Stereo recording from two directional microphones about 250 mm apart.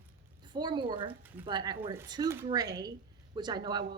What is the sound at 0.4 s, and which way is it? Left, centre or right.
Speech, centre.